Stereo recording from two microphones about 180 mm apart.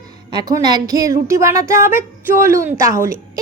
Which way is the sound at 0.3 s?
20° right (ahead or behind).